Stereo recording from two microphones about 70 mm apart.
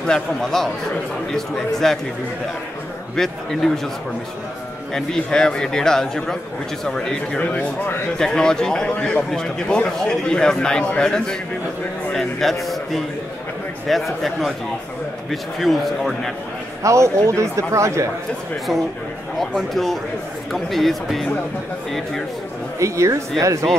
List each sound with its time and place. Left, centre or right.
0.0 s a man's voice: centre
3.2 s a man's voice: centre
4.9 s a man's voice: centre
7.3 s speech: left
8.2 s a man's voice: centre
15.6 s a man's voice: centre
16.8 s speech: right
19.3 s a man's voice: centre
22.8 s speech: right